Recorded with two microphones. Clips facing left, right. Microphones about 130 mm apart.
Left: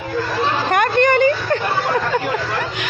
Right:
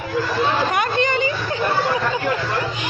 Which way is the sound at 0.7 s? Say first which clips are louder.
Left 5 dB; 55° left (ahead or behind).